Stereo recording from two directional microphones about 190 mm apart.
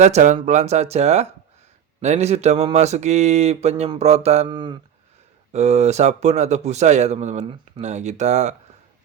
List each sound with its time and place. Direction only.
0.0 s speech: 40° right (ahead or behind)
4.4 s speech: 25° right (ahead or behind)
5.5 s speech: 35° right (ahead or behind)